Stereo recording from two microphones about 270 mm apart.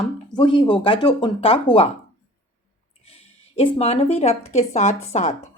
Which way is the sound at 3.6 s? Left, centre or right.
Left.